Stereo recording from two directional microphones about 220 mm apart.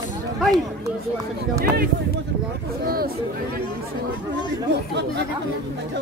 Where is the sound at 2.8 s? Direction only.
45° right (ahead or behind).